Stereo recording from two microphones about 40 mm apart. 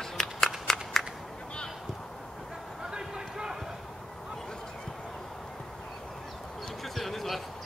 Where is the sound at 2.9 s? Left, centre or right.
Centre.